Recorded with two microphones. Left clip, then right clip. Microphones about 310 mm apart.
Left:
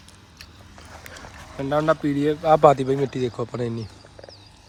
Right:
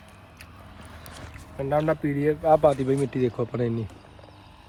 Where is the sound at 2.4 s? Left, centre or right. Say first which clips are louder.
Left 4 dB; left.